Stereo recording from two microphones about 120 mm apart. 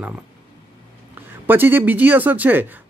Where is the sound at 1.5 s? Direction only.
15° right (ahead or behind).